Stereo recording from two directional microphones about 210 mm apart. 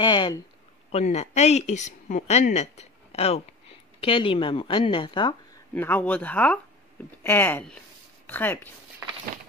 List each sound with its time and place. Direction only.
0.0 s a woman's voice: 20° left (ahead or behind)
0.9 s a woman's voice: 30° left (ahead or behind)
5.8 s speech: 10° left (ahead or behind)